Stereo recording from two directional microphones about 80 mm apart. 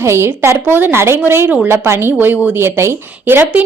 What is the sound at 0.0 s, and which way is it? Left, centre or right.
A woman's voice, right.